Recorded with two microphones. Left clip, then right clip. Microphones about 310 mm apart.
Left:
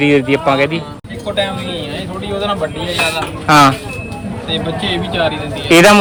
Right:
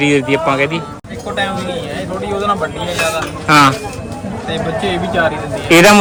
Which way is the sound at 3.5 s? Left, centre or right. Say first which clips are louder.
Left 1 dB; centre.